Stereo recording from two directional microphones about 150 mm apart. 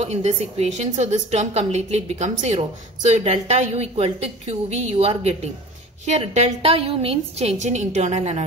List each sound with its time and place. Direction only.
0.0 s a woman's voice: 45° right (ahead or behind)